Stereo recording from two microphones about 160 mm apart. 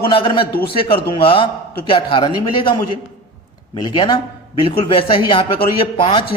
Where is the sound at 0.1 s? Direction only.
30° left (ahead or behind).